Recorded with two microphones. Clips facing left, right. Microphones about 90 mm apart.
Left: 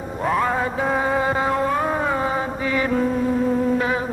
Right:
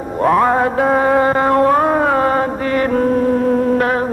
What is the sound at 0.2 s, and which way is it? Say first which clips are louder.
Music: right 8 dB; 55° right (ahead or behind).